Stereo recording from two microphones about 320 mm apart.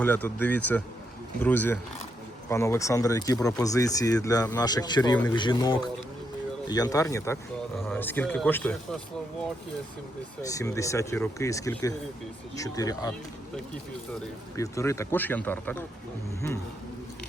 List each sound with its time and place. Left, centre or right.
0.0 s speech: centre
10.4 s speech: centre
14.5 s speech: centre